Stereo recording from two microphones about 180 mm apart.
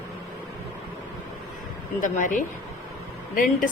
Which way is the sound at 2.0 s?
45° left (ahead or behind).